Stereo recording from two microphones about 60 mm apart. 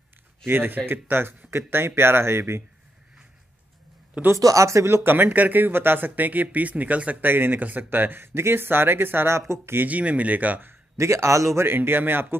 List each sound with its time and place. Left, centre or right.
0.5 s speech: right
4.4 s speech: right
4.8 s speech: right
9.8 s speech: right
10.7 s a man's voice: right
11.6 s speech: right